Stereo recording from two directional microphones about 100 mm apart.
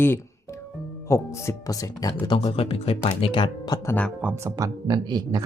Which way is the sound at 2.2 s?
55° left (ahead or behind).